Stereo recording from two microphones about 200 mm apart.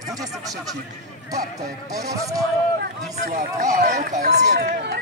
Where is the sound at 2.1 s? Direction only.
15° right (ahead or behind).